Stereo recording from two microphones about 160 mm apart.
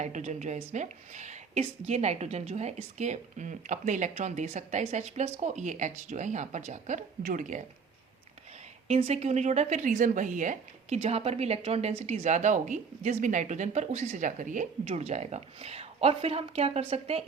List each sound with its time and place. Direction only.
0.0 s speech: 45° right (ahead or behind)
8.9 s speech: 40° right (ahead or behind)